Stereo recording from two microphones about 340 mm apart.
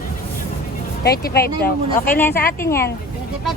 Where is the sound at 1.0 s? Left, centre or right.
Left.